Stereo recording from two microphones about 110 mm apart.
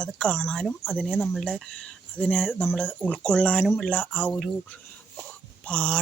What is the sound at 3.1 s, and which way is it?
Speech, 10° left (ahead or behind).